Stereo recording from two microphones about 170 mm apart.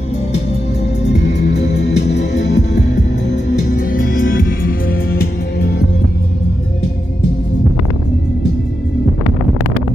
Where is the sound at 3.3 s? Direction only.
50° left (ahead or behind).